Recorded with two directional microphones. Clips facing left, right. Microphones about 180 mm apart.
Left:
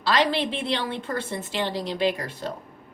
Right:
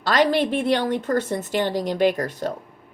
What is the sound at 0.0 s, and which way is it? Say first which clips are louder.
A woman's voice: right 4 dB; 45° right (ahead or behind).